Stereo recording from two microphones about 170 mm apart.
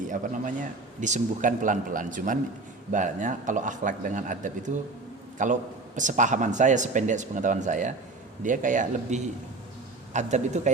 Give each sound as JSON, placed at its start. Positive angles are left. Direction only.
{"t": 0.1, "sound": "speech", "side_deg": -50}